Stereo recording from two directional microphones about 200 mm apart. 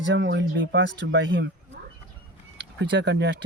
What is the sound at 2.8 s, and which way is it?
Speech, 65° right (ahead or behind).